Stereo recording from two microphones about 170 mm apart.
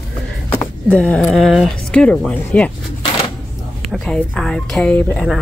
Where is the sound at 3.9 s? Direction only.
5° left (ahead or behind).